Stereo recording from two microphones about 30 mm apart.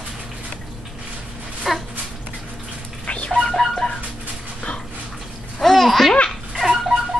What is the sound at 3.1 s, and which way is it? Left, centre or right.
Music, left.